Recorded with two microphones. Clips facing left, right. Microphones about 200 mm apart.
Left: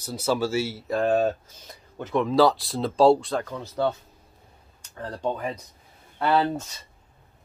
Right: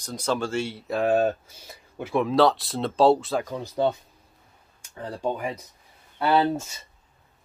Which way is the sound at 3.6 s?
15° right (ahead or behind).